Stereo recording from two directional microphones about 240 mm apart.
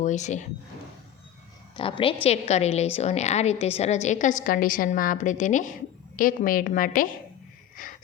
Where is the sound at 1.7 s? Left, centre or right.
Left.